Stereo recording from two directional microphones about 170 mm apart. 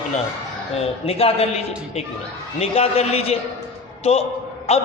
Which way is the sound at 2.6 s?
35° left (ahead or behind).